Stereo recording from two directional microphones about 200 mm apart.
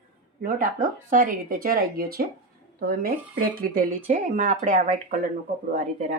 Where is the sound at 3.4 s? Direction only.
45° right (ahead or behind).